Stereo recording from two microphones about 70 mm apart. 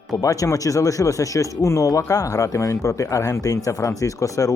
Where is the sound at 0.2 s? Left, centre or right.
Left.